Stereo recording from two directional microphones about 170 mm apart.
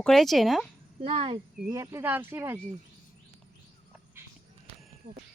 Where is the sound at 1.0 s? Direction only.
30° right (ahead or behind).